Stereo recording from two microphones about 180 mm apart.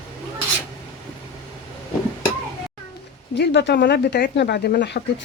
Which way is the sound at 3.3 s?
75° left (ahead or behind).